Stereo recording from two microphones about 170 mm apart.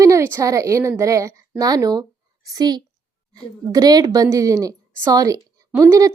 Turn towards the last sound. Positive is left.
turn(degrees=-20)  # may be behind; listen again after turning